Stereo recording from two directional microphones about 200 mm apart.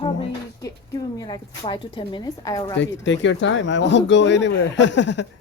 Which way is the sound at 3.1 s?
65° left (ahead or behind).